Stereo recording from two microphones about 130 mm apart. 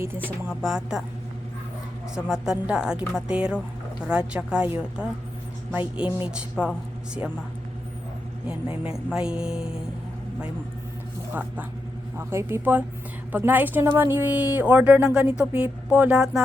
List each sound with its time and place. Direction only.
0.0 s a woman's voice: 15° right (ahead or behind)
2.1 s a woman's voice: 5° right (ahead or behind)
8.4 s a woman's voice: 10° right (ahead or behind)
12.1 s a woman's voice: 20° right (ahead or behind); by 16.4 s 5° right (ahead or behind)